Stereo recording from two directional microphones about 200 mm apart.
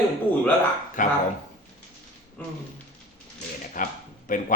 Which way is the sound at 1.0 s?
40° left (ahead or behind).